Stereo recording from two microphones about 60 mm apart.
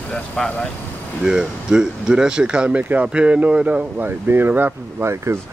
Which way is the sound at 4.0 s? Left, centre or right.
Right.